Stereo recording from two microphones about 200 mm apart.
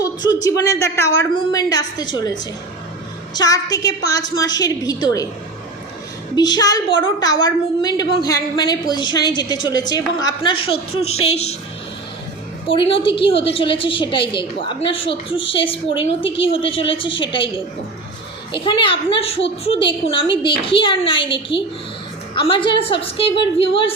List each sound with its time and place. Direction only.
0.0 s a sound: 20° left (ahead or behind)
0.4 s a woman's voice: 15° left (ahead or behind)
6.3 s a woman's voice: 20° left (ahead or behind)
12.6 s a woman's voice: 25° left (ahead or behind)
18.5 s a woman's voice: 25° left (ahead or behind)